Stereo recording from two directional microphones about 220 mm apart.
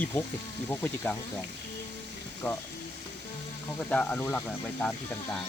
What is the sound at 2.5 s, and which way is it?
Speech, 10° left (ahead or behind).